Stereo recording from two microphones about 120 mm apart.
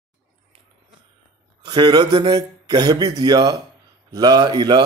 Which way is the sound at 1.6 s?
40° right (ahead or behind).